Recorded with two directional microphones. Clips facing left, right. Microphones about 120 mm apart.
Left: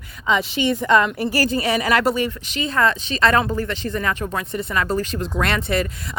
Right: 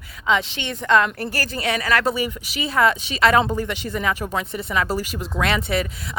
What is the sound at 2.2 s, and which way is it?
Speech, 5° right (ahead or behind).